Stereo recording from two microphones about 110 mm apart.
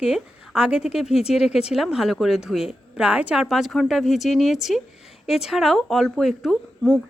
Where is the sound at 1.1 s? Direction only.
70° left (ahead or behind).